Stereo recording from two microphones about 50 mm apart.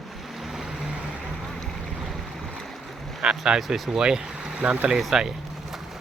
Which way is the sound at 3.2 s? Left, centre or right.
Centre.